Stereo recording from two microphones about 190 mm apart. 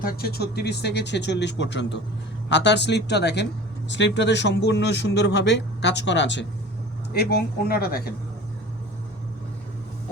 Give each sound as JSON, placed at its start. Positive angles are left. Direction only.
{"t": 0.0, "sound": "a man's voice", "side_deg": 50}
{"t": 7.1, "sound": "speech", "side_deg": 55}